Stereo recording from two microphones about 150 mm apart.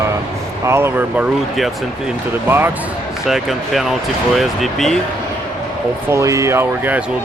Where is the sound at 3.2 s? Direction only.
Centre (ahead or behind).